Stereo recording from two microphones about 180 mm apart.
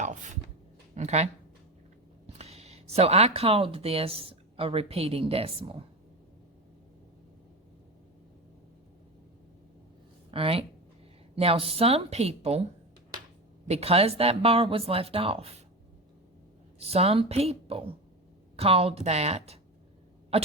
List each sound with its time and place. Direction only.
0.0 s speech: 40° right (ahead or behind)
10.3 s speech: 30° right (ahead or behind)
13.7 s speech: 35° right (ahead or behind)
16.8 s speech: 35° right (ahead or behind)